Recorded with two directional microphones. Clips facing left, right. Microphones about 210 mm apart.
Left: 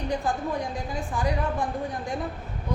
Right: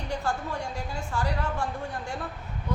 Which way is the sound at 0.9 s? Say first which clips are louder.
Left 3 dB; 15° left (ahead or behind).